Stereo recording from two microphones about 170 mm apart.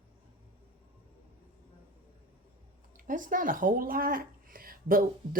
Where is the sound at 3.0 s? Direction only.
50° right (ahead or behind).